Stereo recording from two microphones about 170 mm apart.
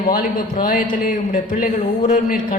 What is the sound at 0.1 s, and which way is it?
A woman's voice, 55° left (ahead or behind).